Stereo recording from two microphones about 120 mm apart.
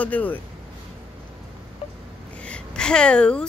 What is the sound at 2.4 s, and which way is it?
A woman's voice, 10° left (ahead or behind).